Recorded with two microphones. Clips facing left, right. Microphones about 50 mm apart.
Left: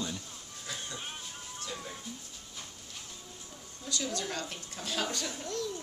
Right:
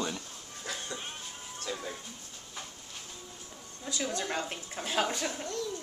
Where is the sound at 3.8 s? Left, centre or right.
Right.